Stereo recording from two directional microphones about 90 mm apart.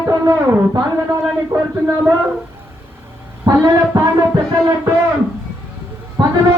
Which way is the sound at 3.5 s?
45° right (ahead or behind).